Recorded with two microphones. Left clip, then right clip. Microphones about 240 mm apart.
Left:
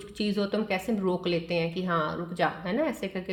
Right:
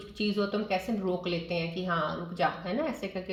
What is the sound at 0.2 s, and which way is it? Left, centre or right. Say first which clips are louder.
A woman's voice: left 1 dB; left.